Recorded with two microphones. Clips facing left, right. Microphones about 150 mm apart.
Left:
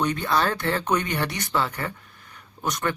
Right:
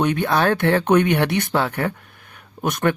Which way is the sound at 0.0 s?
60° right (ahead or behind).